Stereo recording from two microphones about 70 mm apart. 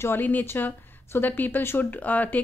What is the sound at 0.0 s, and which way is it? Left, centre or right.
A woman's voice, left.